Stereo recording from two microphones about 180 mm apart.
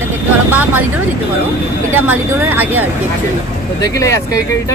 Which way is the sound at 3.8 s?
15° left (ahead or behind).